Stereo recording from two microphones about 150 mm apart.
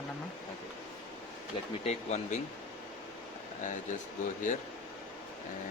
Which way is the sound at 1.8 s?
50° left (ahead or behind).